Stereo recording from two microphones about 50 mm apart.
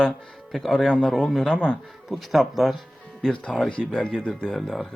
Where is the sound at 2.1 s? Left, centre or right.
Centre.